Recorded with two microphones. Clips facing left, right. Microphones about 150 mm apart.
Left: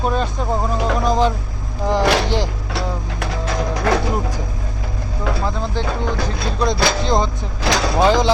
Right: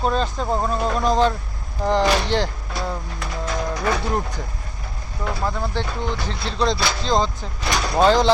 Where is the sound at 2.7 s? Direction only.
75° left (ahead or behind).